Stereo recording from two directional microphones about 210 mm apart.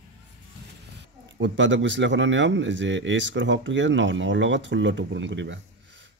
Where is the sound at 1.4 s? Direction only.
60° right (ahead or behind).